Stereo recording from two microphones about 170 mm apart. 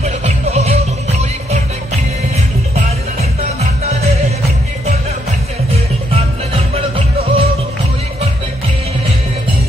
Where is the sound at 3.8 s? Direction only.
40° right (ahead or behind).